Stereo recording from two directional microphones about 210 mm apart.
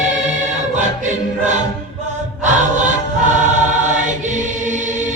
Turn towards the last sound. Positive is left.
turn(degrees=-35)  # may be behind; listen again after turning